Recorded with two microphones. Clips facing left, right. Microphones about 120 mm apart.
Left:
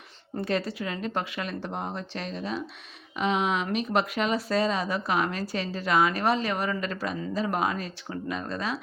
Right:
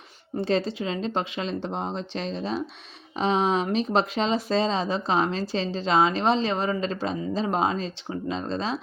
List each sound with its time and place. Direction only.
0.3 s speech: 25° right (ahead or behind)